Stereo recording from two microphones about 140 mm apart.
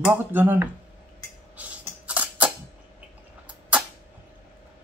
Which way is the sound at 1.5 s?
10° right (ahead or behind).